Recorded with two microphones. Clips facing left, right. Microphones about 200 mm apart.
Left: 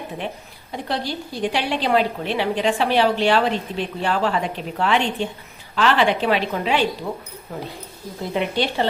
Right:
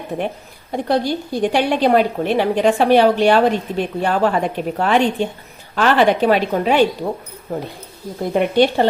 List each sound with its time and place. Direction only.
0.7 s a woman's voice: 50° right (ahead or behind)
8.3 s a woman's voice: 50° right (ahead or behind)